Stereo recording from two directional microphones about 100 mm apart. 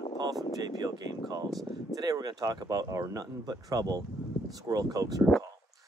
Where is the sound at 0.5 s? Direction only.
40° right (ahead or behind).